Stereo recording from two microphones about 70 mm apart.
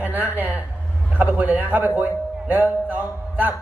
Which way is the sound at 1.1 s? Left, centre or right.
Right.